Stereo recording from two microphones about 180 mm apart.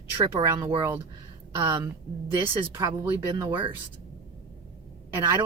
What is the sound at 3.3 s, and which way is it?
Speech, 25° right (ahead or behind).